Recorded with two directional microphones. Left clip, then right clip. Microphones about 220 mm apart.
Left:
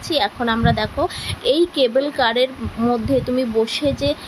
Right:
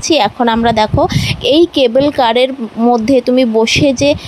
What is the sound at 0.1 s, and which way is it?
Speech, 30° right (ahead or behind).